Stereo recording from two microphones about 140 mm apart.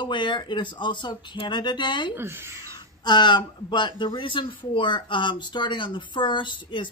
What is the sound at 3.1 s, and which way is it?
Speech, 35° left (ahead or behind).